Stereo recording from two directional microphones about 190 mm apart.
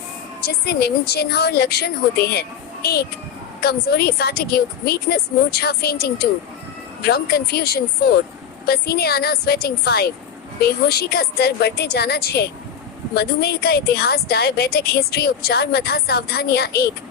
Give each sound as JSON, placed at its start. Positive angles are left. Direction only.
{"t": 0.4, "sound": "a woman's voice", "side_deg": 55}